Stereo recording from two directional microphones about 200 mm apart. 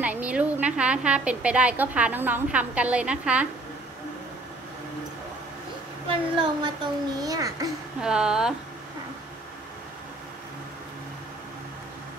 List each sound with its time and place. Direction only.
0.0 s a woman's voice: 5° right (ahead or behind)
6.3 s a child's voice: 20° right (ahead or behind)
8.0 s speech: 5° right (ahead or behind)